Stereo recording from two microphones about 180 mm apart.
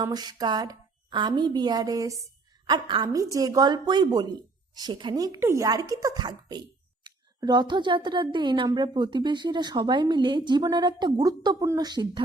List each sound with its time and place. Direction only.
0.0 s a woman's voice: 20° right (ahead or behind)